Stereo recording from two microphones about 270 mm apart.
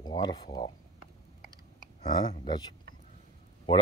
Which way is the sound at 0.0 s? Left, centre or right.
Centre.